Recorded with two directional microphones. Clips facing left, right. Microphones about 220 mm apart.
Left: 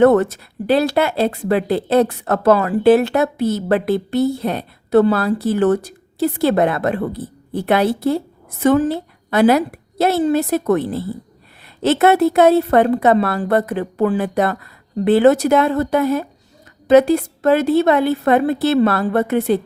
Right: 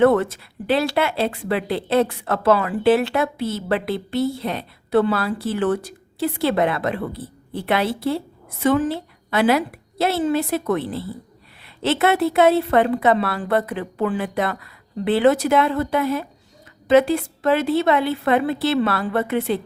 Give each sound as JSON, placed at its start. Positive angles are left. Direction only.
{"t": 0.0, "sound": "speech", "side_deg": 45}